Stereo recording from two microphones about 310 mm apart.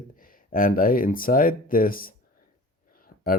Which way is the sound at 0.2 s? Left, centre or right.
Left.